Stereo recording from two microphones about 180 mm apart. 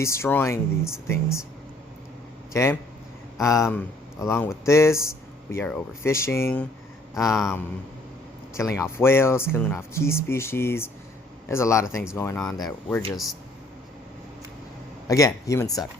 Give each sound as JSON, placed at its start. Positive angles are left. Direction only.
{"t": 0.0, "sound": "speech", "side_deg": 15}
{"t": 2.5, "sound": "speech", "side_deg": 15}
{"t": 8.5, "sound": "speech", "side_deg": 15}
{"t": 15.0, "sound": "speech", "side_deg": 20}